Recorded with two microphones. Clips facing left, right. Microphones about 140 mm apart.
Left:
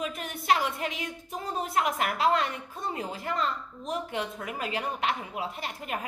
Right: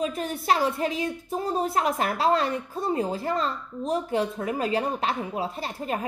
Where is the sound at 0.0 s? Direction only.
35° right (ahead or behind).